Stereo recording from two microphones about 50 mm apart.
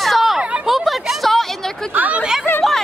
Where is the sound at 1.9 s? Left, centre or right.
Right.